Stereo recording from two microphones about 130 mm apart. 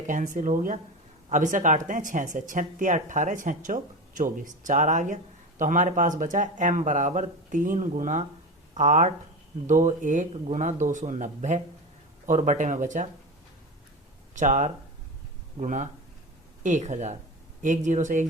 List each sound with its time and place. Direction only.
0.1 s speech: 85° right
4.2 s speech: 75° right (ahead or behind)
9.6 s speech: 80° right
14.3 s speech: 65° right (ahead or behind)